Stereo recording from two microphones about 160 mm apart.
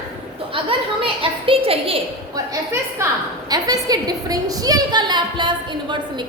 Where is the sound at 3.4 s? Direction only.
25° right (ahead or behind).